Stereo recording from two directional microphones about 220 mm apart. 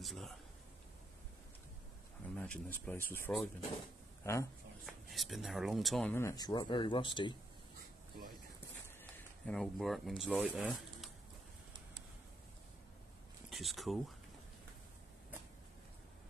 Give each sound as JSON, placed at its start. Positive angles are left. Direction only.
{"t": 0.0, "sound": "speech", "side_deg": 0}
{"t": 2.3, "sound": "speech", "side_deg": 5}
{"t": 4.8, "sound": "speech", "side_deg": 0}
{"t": 6.1, "sound": "speech", "side_deg": 15}
{"t": 9.1, "sound": "speech", "side_deg": 0}
{"t": 13.5, "sound": "speech", "side_deg": 0}